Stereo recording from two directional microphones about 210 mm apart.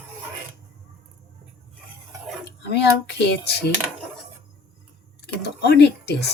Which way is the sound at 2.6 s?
50° left (ahead or behind).